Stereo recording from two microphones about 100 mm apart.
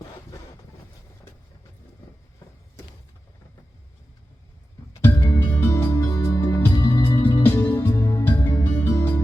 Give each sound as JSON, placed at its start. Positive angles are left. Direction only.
{"t": 5.0, "sound": "music", "side_deg": 20}